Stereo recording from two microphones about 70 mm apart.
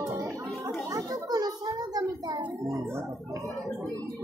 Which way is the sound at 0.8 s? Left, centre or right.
Right.